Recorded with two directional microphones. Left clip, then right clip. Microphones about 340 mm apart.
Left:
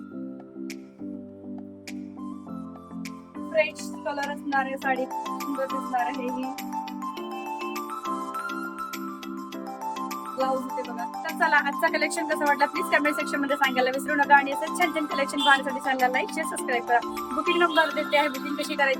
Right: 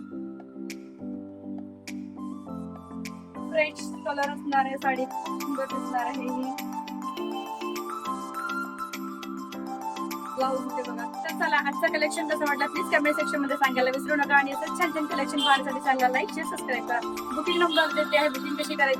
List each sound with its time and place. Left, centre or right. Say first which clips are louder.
3.5 s speech: left 2 dB; centre
7.0 s music: even; centre
9.8 s speech: left 3 dB; centre